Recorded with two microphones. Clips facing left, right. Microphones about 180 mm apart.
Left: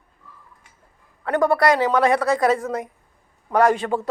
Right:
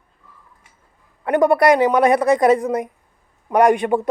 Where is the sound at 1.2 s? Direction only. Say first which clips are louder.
Right 4 dB; 15° right (ahead or behind).